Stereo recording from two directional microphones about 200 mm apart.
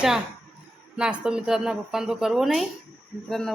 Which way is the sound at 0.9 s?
5° right (ahead or behind).